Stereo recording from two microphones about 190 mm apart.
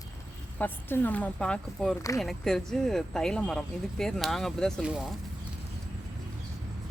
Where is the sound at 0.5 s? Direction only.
10° left (ahead or behind).